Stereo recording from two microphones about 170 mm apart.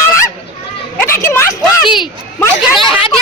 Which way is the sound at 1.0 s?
15° left (ahead or behind).